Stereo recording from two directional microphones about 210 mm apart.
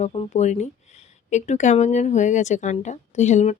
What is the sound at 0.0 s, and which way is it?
Speech, 30° left (ahead or behind).